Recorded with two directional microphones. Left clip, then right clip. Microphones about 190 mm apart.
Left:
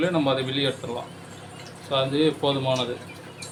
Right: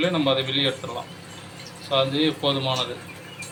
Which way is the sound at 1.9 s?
40° left (ahead or behind).